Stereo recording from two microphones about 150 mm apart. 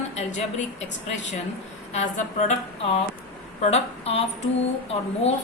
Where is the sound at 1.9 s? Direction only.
50° left (ahead or behind).